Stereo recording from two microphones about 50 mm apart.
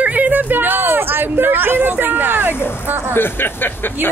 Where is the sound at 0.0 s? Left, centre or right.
Right.